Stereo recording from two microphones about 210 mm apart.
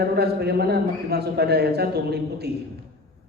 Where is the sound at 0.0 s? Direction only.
50° right (ahead or behind).